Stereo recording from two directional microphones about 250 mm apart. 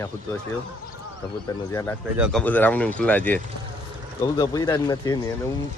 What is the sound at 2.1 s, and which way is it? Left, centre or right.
Speech, centre.